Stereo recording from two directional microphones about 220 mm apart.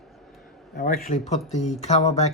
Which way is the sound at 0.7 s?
45° left (ahead or behind).